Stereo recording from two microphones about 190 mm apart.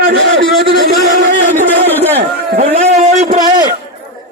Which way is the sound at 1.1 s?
40° right (ahead or behind).